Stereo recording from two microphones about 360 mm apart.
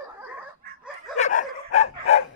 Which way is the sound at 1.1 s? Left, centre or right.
Centre.